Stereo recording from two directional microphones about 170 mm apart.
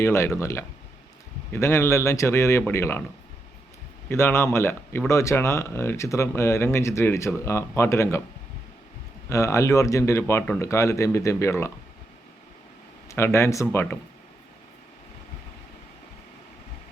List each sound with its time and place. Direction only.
0.0 s speech: 15° left (ahead or behind)
4.1 s speech: 15° left (ahead or behind)
9.3 s speech: 15° left (ahead or behind)
13.1 s speech: 15° left (ahead or behind)